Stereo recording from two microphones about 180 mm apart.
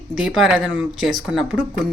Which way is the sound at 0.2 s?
Centre (ahead or behind).